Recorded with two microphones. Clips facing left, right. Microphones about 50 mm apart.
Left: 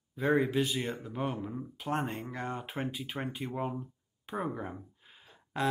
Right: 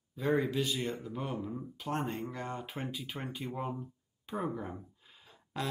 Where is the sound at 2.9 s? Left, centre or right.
Left.